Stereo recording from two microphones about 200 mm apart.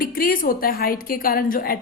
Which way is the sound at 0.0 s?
45° left (ahead or behind).